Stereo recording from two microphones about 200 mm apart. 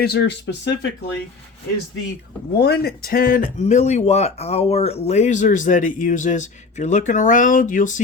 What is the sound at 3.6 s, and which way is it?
Speech, 35° left (ahead or behind).